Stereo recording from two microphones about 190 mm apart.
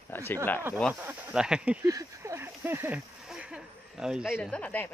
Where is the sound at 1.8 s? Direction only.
15° right (ahead or behind).